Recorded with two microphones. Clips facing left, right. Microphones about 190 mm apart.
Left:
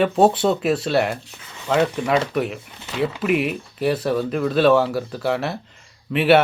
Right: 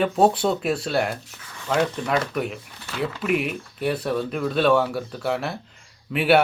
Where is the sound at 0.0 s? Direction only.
Centre (ahead or behind).